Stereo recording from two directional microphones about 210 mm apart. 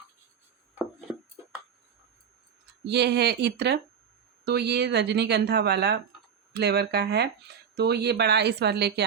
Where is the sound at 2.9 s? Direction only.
50° right (ahead or behind).